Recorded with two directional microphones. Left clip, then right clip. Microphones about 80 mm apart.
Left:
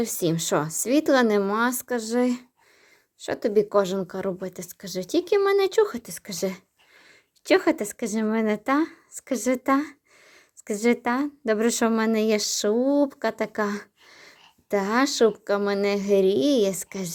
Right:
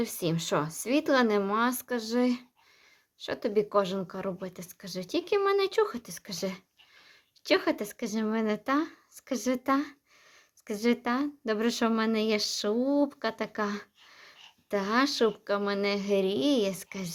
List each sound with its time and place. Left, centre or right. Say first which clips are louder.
0.0 s speech: left 6 dB; left
1.4 s speech: left 4 dB; left